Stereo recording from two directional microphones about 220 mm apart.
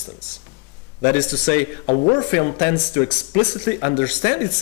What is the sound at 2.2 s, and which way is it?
Speech, 25° left (ahead or behind).